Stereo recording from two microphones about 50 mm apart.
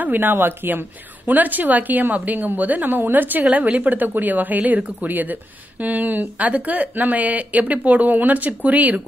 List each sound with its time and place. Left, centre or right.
0.0 s speech: right